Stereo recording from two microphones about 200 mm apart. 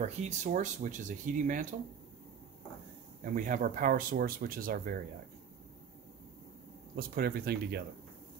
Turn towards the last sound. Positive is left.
turn(degrees=-50)  # may be behind; listen again after turning